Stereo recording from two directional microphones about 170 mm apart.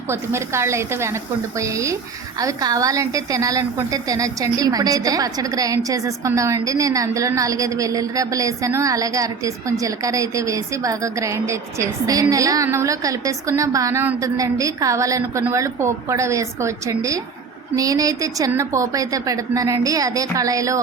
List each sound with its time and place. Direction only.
0.1 s a woman's voice: 15° right (ahead or behind)